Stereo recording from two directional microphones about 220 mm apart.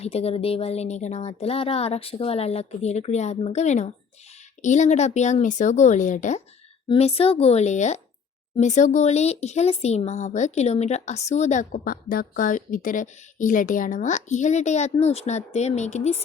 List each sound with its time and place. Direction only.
0.0 s speech: 25° left (ahead or behind)